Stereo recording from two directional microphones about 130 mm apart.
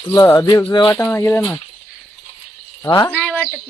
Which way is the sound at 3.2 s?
5° left (ahead or behind).